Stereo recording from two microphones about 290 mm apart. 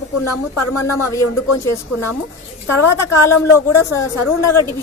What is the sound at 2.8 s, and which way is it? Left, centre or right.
A woman's voice, left.